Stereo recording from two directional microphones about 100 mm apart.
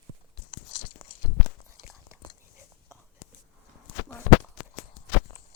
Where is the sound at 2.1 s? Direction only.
25° right (ahead or behind).